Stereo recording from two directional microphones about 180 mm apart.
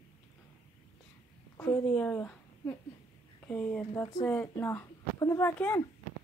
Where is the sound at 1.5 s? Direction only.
10° left (ahead or behind).